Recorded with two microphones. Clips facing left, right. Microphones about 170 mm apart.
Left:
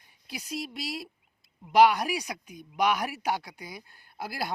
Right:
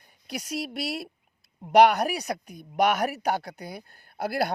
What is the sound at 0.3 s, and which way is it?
Speech, 70° right (ahead or behind).